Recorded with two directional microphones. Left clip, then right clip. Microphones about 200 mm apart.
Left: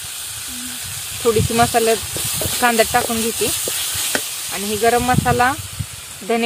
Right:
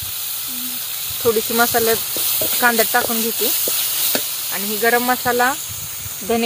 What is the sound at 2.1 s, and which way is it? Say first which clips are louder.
Speech: right 1 dB; centre (ahead or behind).